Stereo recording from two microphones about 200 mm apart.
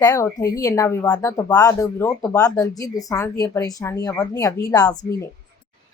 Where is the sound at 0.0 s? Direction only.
15° left (ahead or behind).